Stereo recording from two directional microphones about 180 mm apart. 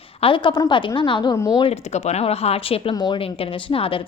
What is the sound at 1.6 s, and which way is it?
A woman's voice, 35° left (ahead or behind).